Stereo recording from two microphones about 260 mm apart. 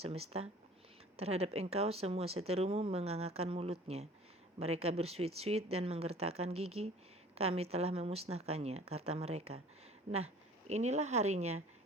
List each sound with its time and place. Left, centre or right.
0.0 s a woman's voice: right